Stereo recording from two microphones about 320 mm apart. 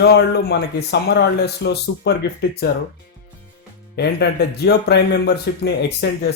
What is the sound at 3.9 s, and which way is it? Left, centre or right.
Speech, left.